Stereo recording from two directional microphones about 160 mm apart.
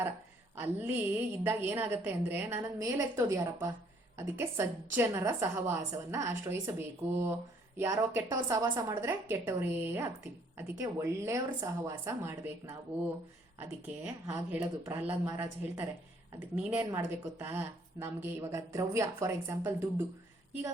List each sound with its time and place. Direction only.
0.5 s speech: 15° right (ahead or behind)